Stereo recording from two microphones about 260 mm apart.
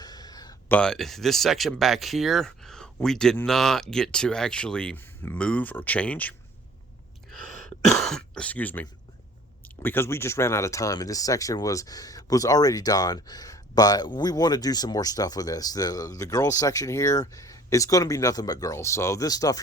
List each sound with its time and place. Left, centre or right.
0.0 s a sound: centre
0.8 s speech: centre
7.3 s throat clearing: centre
9.6 s speech: centre